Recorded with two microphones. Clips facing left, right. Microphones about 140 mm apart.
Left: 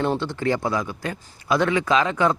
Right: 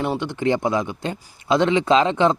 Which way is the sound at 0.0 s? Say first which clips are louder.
Right 1 dB; 15° right (ahead or behind).